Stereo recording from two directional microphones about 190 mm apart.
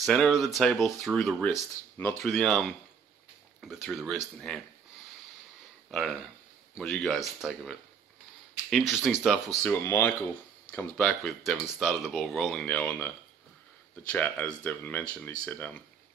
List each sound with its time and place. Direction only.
0.0 s speech: centre (ahead or behind)
5.9 s speech: centre (ahead or behind)
9.5 s speech: 15° left (ahead or behind)
14.1 s speech: 10° left (ahead or behind)